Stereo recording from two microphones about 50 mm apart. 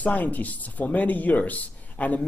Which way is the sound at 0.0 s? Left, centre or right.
Left.